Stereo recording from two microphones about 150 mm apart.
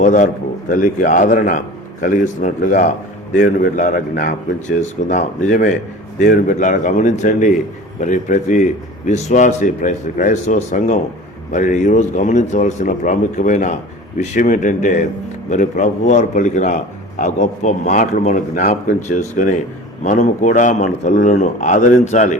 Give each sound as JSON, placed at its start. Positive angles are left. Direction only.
{"t": 0.0, "sound": "a man's voice", "side_deg": 60}
{"t": 4.8, "sound": "a man's voice", "side_deg": 55}